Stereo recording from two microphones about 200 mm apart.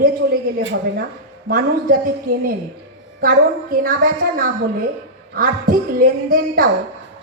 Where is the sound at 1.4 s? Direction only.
45° right (ahead or behind).